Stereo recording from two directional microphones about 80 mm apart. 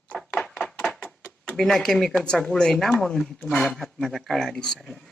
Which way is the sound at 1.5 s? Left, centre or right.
Centre.